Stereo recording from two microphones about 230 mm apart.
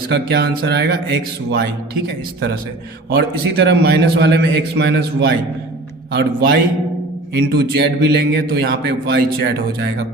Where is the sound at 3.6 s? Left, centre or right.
Right.